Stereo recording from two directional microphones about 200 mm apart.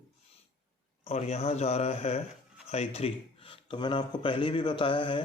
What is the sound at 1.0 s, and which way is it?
Speech, 30° left (ahead or behind).